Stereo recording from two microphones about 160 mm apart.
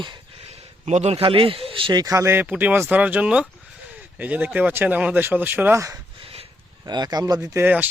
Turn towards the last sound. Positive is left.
turn(degrees=-10)  # may be behind; listen again after turning